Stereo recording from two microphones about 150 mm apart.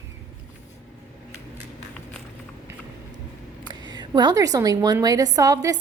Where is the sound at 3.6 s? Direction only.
30° right (ahead or behind).